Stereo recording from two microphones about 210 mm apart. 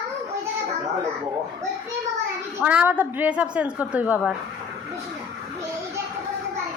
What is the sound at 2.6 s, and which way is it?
A woman's voice, 5° right (ahead or behind).